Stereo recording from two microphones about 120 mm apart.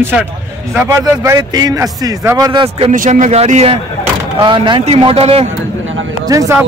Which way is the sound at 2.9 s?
90° right.